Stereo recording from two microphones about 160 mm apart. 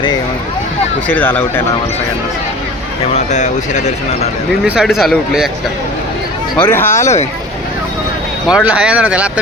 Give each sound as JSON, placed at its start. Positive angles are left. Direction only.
{"t": 1.0, "sound": "speech", "side_deg": 10}
{"t": 3.2, "sound": "speech", "side_deg": 50}
{"t": 4.6, "sound": "speech", "side_deg": -5}
{"t": 6.6, "sound": "speech", "side_deg": 15}
{"t": 7.0, "sound": "speech", "side_deg": 45}
{"t": 8.4, "sound": "speech", "side_deg": -5}